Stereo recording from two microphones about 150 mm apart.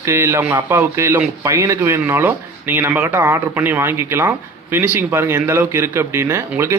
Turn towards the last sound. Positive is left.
turn(degrees=-15)  # may be behind; listen again after turning